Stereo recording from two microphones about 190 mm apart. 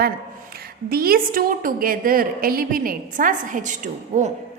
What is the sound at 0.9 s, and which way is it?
A woman's voice, 50° right (ahead or behind).